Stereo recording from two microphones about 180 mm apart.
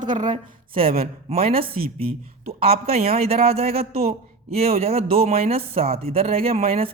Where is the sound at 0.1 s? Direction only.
25° right (ahead or behind).